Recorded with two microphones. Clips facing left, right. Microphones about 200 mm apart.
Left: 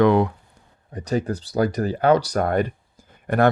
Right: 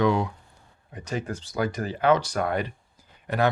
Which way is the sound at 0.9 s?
40° left (ahead or behind).